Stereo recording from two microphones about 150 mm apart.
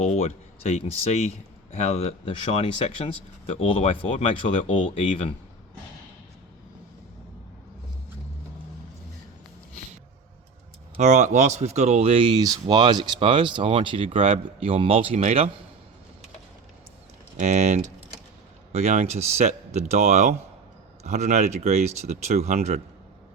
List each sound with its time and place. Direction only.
0.0 s speech: 45° left (ahead or behind)
10.9 s speech: 50° right (ahead or behind)
17.3 s speech: 50° right (ahead or behind)